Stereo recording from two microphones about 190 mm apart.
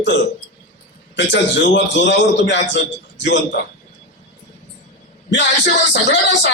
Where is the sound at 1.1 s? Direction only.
65° left (ahead or behind).